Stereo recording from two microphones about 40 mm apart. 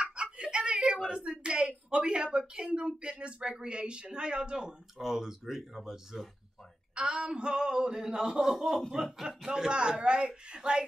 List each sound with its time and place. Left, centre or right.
0.0 s speech: right
4.9 s speech: centre
7.0 s a man's voice: right